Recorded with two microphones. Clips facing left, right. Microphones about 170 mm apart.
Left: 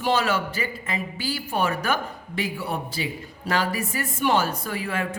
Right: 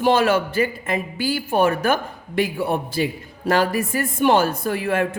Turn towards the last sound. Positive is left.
turn(degrees=-55)  # may be behind; listen again after turning